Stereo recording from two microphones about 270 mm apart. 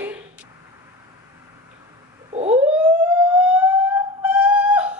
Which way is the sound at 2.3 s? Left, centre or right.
Right.